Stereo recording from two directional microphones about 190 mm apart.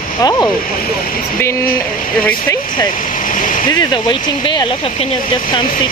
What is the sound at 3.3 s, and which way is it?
Speech, 45° left (ahead or behind).